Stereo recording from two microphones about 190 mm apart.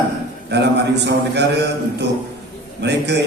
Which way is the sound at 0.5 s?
60° right (ahead or behind).